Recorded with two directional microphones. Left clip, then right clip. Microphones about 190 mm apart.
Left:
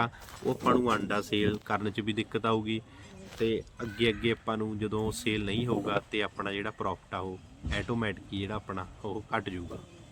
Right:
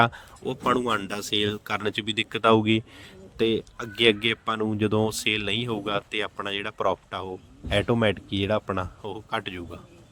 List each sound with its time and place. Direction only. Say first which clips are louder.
0.6 s speech: right 3 dB; 50° right (ahead or behind)
3.3 s speech: right 6 dB; 60° right (ahead or behind); by 9.6 s 40° right (ahead or behind)